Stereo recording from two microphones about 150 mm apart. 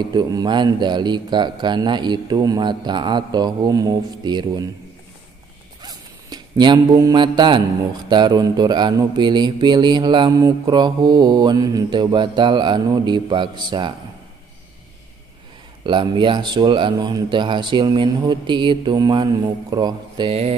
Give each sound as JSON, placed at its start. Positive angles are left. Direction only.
{"t": 0.0, "sound": "speech", "side_deg": -30}
{"t": 5.8, "sound": "zipper", "side_deg": -25}
{"t": 8.1, "sound": "speech", "side_deg": -30}
{"t": 15.8, "sound": "speech", "side_deg": -30}
{"t": 20.2, "sound": "speech", "side_deg": -40}